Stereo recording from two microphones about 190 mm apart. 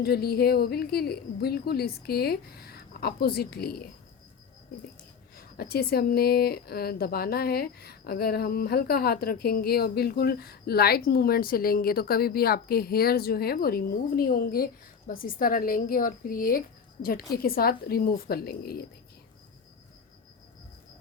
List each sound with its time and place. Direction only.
0.0 s a woman's voice: 55° left (ahead or behind)
5.4 s speech: 55° left (ahead or behind)